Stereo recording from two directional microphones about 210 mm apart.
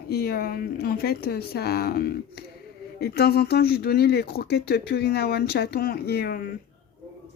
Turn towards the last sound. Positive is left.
turn(degrees=50)  # may be behind; listen again after turning